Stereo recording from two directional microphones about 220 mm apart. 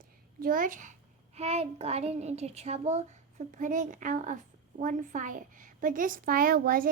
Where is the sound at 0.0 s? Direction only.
40° right (ahead or behind).